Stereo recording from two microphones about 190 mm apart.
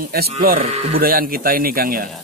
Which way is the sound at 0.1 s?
55° right (ahead or behind).